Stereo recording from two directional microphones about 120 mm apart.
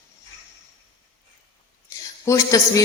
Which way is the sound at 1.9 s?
25° left (ahead or behind).